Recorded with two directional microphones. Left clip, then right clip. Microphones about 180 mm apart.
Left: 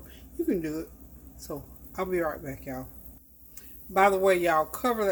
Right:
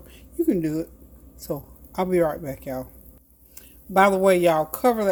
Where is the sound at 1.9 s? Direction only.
45° right (ahead or behind).